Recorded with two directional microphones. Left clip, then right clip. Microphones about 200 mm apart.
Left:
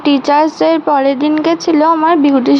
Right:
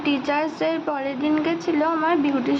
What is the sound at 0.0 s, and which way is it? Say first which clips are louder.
Speech: left 12 dB; 30° left (ahead or behind).